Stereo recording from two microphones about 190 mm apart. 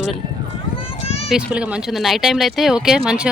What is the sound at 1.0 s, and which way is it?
Run, 30° left (ahead or behind).